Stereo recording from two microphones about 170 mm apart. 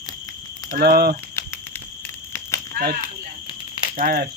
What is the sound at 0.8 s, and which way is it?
Speech, 65° right (ahead or behind).